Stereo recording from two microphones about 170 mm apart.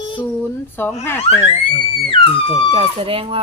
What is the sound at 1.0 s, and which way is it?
Child singing, 15° left (ahead or behind).